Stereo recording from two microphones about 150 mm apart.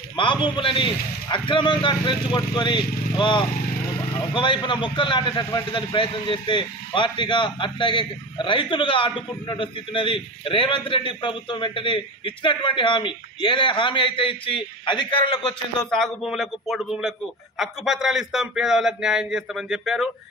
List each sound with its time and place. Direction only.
0.1 s a man's voice: 35° left (ahead or behind)
15.8 s a man's voice: 5° left (ahead or behind)